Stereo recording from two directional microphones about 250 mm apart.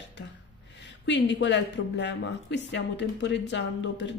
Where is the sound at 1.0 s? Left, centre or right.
Left.